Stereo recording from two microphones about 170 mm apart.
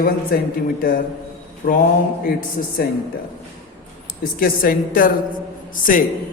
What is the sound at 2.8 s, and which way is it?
Speech, 60° left (ahead or behind).